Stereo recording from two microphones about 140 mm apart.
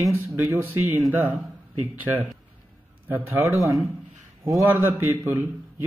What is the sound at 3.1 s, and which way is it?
Speech, 15° right (ahead or behind).